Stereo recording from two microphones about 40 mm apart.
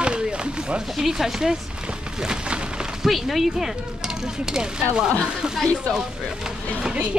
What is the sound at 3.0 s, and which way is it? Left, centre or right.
Speech, centre.